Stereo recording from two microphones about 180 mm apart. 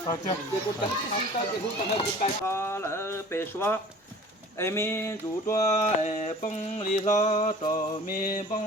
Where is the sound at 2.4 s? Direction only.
15° left (ahead or behind).